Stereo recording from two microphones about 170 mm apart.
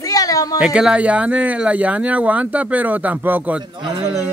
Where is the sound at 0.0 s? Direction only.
20° left (ahead or behind).